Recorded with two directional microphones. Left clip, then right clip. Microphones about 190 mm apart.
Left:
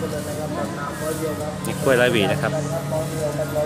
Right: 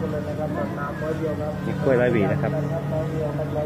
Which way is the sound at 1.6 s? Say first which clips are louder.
Left 3 dB; 25° left (ahead or behind).